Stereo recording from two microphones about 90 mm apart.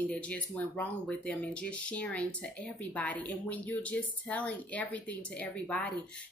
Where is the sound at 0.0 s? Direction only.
15° left (ahead or behind).